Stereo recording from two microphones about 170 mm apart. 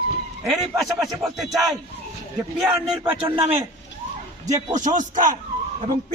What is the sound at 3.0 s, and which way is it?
Speech, 30° right (ahead or behind).